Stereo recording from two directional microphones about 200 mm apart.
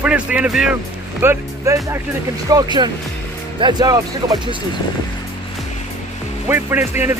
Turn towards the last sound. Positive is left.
turn(degrees=-10)  # may be behind; listen again after turning